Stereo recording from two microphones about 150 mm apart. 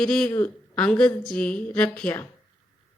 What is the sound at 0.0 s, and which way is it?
A woman's voice, 5° left (ahead or behind).